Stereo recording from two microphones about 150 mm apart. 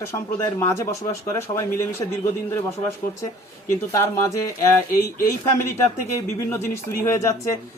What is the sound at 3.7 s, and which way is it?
Speech, 20° left (ahead or behind).